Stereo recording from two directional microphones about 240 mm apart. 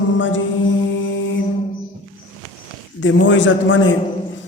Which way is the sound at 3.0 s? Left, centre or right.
Left.